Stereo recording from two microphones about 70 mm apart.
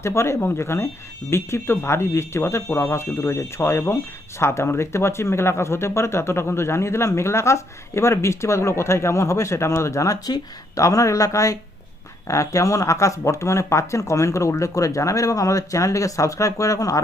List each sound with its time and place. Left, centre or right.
0.0 s speech: left